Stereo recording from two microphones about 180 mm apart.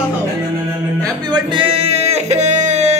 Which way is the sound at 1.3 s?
30° right (ahead or behind).